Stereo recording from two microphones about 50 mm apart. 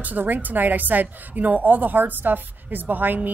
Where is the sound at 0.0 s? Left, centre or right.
Right.